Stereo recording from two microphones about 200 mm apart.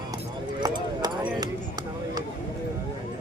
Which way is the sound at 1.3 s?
20° right (ahead or behind).